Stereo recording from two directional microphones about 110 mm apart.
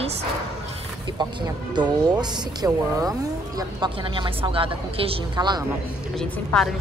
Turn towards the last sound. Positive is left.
turn(degrees=5)  # may be behind; listen again after turning